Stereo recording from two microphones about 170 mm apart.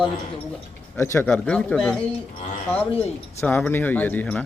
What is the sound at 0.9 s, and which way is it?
Speech, 15° left (ahead or behind).